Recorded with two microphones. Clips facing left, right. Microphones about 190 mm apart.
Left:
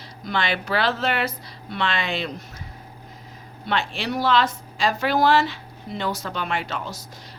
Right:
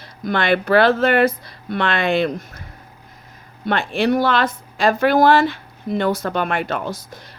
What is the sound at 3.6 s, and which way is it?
A woman's voice, 50° right (ahead or behind).